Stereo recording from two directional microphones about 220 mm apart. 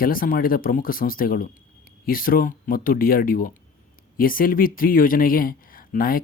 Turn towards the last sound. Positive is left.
turn(degrees=40)  # may be behind; listen again after turning